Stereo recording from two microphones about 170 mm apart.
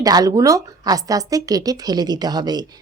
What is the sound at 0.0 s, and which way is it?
Speech, 20° right (ahead or behind).